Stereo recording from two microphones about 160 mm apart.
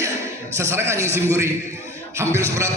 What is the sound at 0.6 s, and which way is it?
Speech, 15° right (ahead or behind).